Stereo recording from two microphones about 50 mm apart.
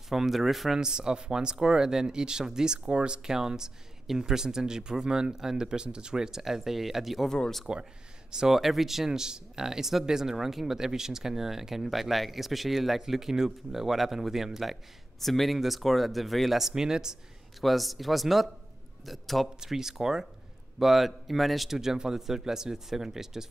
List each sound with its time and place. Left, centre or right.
0.1 s speech: centre; by 3.2 s right
3.3 s speech: centre
7.2 s speech: centre
8.3 s speech: centre
8.5 s speech: centre
17.6 s speech: centre
19.6 s speech: centre